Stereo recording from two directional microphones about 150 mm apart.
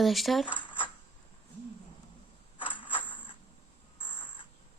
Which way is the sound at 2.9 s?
10° left (ahead or behind).